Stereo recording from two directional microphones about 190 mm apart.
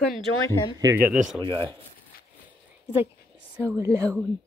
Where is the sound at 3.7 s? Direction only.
15° right (ahead or behind).